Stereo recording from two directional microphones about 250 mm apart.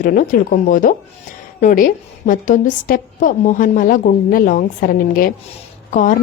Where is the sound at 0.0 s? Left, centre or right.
Left.